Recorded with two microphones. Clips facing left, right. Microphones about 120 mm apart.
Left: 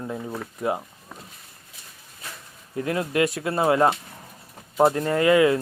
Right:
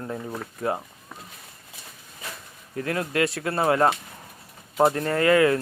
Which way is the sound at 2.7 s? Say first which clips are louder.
Left 2 dB; 20° left (ahead or behind).